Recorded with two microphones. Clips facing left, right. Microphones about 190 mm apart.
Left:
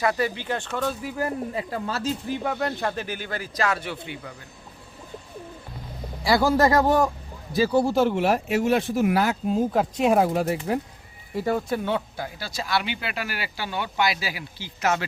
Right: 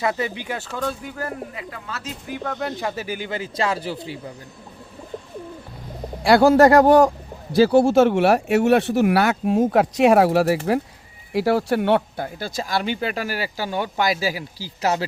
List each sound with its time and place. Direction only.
0.0 s speech: 20° right (ahead or behind); by 1.1 s 5° left (ahead or behind)
1.5 s speech: 30° left (ahead or behind)
2.4 s speech: 5° left (ahead or behind); by 4.2 s 35° right (ahead or behind)
6.2 s speech: 70° right (ahead or behind); by 15.0 s 35° right (ahead or behind)